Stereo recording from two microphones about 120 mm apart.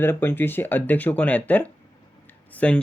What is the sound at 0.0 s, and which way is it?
Speech, 20° left (ahead or behind).